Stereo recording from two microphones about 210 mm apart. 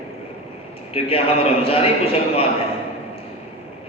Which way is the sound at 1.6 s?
25° left (ahead or behind).